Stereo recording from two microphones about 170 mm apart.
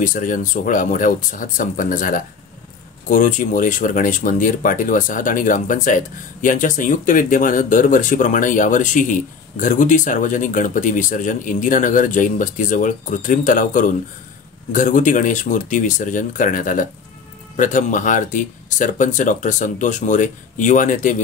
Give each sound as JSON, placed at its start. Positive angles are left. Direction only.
{"t": 0.0, "sound": "speech", "side_deg": 50}